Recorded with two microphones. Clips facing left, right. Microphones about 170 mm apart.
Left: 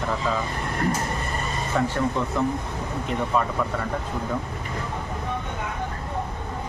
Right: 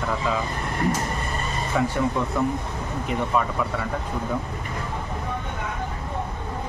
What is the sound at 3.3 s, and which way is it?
Speech, 5° right (ahead or behind).